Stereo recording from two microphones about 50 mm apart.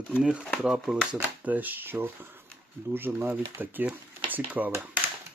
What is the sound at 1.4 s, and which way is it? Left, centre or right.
Speech, right.